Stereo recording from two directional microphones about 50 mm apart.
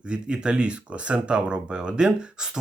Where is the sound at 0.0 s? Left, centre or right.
Centre.